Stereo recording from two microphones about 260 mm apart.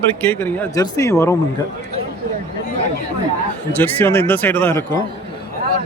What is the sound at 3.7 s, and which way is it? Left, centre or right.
Speech, centre.